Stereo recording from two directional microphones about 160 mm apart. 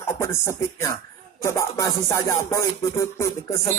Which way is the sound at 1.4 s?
20° left (ahead or behind).